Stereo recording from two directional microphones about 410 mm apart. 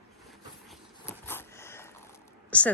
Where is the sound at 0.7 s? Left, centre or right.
Centre.